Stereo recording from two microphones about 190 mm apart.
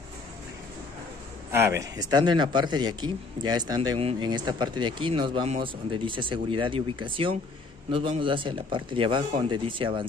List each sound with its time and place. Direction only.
1.8 s speech: 20° right (ahead or behind)